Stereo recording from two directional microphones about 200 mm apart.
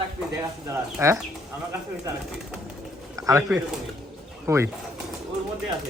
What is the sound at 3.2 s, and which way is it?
Speech, 15° right (ahead or behind).